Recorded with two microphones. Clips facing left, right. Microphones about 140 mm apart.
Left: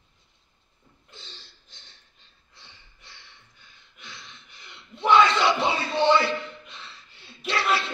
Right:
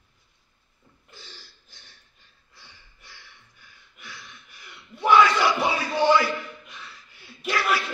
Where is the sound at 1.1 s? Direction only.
20° left (ahead or behind).